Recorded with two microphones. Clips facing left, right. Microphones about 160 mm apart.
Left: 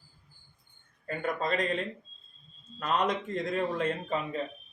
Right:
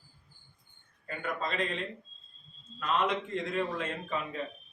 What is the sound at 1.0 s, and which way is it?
Speech, 40° left (ahead or behind).